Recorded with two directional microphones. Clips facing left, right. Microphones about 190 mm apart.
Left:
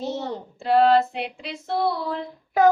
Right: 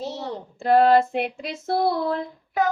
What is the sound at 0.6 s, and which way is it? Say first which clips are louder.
Female singing: right 1 dB; 50° right (ahead or behind).